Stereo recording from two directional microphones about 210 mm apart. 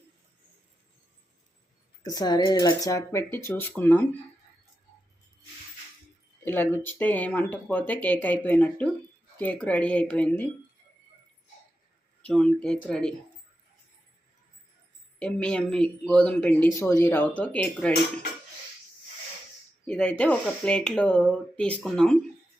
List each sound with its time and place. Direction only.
2.1 s speech: 20° left (ahead or behind)
6.4 s speech: 10° left (ahead or behind)
12.2 s speech: 5° left (ahead or behind)
15.2 s speech: 5° left (ahead or behind)
19.9 s speech: 5° left (ahead or behind)